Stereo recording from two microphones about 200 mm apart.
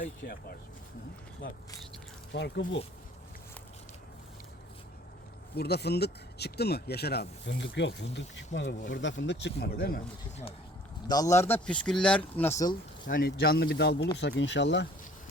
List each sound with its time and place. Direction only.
0.2 s speech: 45° left (ahead or behind)
2.3 s speech: 60° left (ahead or behind)
5.5 s speech: 55° left (ahead or behind)
11.1 s speech: 15° left (ahead or behind)
13.1 s speech: 45° left (ahead or behind)